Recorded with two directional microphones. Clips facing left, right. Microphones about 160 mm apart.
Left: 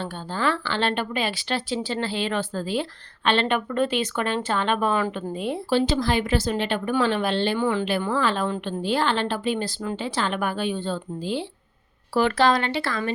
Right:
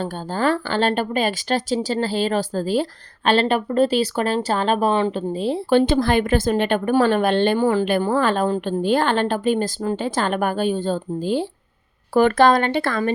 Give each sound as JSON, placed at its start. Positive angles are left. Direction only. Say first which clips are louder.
{"t": 0.0, "sound": "speech", "louder": "right 4 dB", "side_deg": -45}
{"t": 5.7, "sound": "a woman's voice", "louder": "right 5 dB", "side_deg": -55}